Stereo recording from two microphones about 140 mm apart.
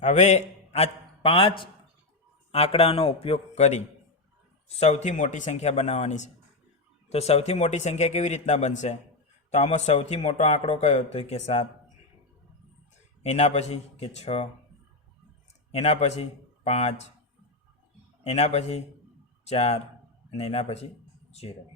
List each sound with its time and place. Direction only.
0.0 s a man's voice: 60° left (ahead or behind)
13.2 s speech: 50° left (ahead or behind)
15.7 s a man's voice: 50° left (ahead or behind)
18.2 s speech: 50° left (ahead or behind)
21.2 s a sound: 50° left (ahead or behind)